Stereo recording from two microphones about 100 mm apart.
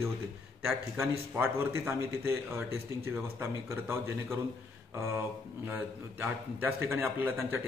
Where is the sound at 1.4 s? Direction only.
20° right (ahead or behind).